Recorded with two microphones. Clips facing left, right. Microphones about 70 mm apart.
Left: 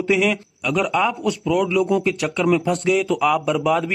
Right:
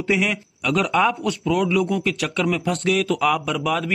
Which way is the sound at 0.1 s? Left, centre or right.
Centre.